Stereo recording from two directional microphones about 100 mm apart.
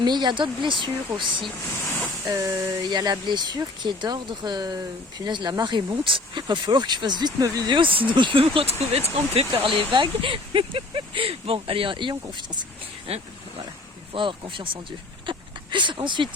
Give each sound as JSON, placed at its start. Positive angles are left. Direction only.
{"t": 0.0, "sound": "speech", "side_deg": -50}
{"t": 2.3, "sound": "speech", "side_deg": -35}
{"t": 7.7, "sound": "speech", "side_deg": -60}
{"t": 9.6, "sound": "speech", "side_deg": -55}
{"t": 13.1, "sound": "speech", "side_deg": -90}
{"t": 14.1, "sound": "speech", "side_deg": -55}